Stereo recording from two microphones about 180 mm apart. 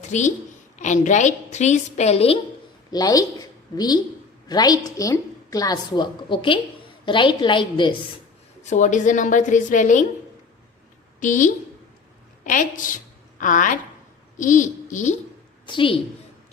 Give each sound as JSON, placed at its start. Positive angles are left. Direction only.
{"t": 0.0, "sound": "a woman's voice", "side_deg": 40}
{"t": 2.9, "sound": "a woman's voice", "side_deg": 20}
{"t": 8.6, "sound": "a woman's voice", "side_deg": 45}
{"t": 11.2, "sound": "a woman's voice", "side_deg": 45}
{"t": 15.6, "sound": "a woman's voice", "side_deg": 30}